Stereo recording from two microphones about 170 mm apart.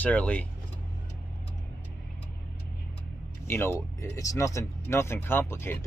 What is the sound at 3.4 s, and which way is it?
Speech, 15° left (ahead or behind).